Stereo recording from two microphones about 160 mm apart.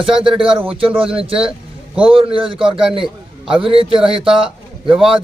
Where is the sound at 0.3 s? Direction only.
30° right (ahead or behind).